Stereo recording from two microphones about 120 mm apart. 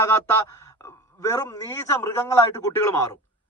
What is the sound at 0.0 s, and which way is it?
A man's voice, 20° left (ahead or behind).